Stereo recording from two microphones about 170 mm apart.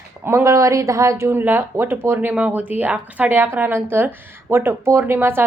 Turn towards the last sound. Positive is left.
turn(degrees=-15)  # may be behind; listen again after turning